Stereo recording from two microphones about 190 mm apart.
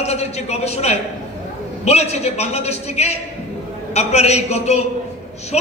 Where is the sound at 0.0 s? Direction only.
35° left (ahead or behind).